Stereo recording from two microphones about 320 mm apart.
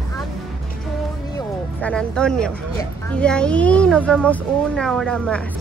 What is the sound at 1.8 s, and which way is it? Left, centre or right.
A woman's voice, centre.